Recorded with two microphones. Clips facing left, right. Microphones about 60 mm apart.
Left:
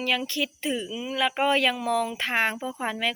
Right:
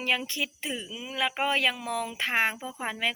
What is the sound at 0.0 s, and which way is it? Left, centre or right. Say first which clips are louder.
Speech: left 2 dB; right.